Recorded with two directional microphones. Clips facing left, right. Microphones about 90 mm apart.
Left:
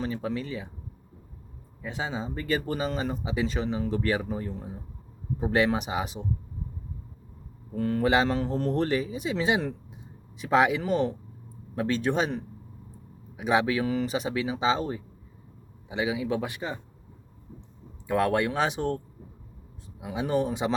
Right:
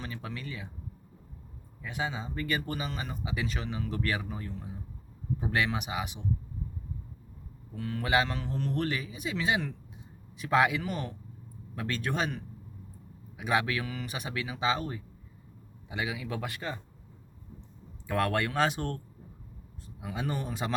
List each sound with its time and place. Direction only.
0.0 s speech: 30° left (ahead or behind)
1.8 s a man's voice: 25° left (ahead or behind)
7.8 s a man's voice: 40° left (ahead or behind); by 16.8 s 15° left (ahead or behind)
18.1 s speech: 15° left (ahead or behind)
20.0 s speech: 15° left (ahead or behind)